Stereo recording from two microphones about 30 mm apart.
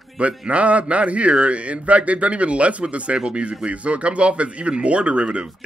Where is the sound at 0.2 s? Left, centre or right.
Right.